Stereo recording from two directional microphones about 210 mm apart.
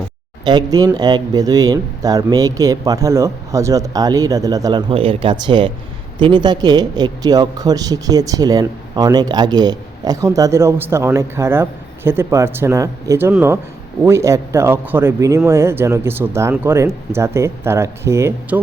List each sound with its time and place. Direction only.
0.4 s speech: 20° right (ahead or behind)